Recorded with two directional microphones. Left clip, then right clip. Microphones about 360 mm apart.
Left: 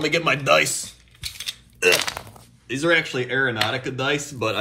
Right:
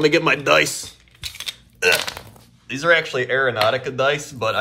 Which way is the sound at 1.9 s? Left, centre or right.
Centre.